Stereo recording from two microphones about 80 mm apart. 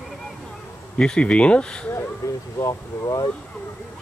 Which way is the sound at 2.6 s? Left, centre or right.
Left.